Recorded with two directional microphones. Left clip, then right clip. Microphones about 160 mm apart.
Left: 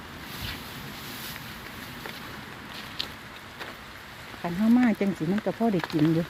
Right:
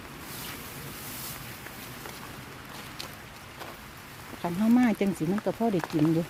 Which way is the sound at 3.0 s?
25° right (ahead or behind).